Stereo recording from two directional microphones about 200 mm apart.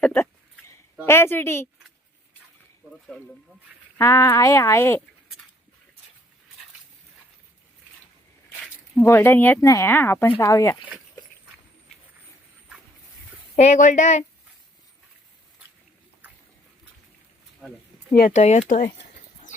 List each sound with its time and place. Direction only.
0.0 s a sound: 10° left (ahead or behind)
1.0 s speech: 10° left (ahead or behind)
3.9 s speech: 15° left (ahead or behind)
9.0 s speech: 10° left (ahead or behind)
13.6 s speech: 35° left (ahead or behind)
18.2 s speech: 40° left (ahead or behind)